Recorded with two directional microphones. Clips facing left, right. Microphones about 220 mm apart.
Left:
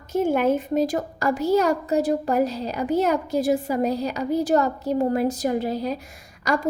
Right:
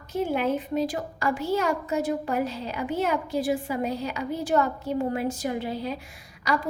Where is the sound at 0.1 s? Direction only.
45° left (ahead or behind).